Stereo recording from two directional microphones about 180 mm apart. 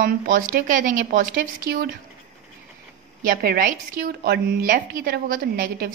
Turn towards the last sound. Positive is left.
turn(degrees=-50)  # may be behind; listen again after turning